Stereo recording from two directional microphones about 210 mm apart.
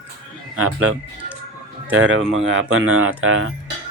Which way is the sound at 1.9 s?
70° right (ahead or behind).